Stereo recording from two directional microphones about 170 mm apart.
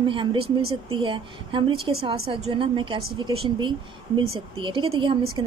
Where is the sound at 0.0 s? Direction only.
30° right (ahead or behind).